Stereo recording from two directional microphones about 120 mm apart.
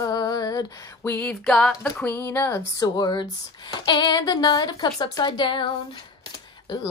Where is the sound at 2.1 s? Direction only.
20° left (ahead or behind); by 5.7 s 40° left (ahead or behind).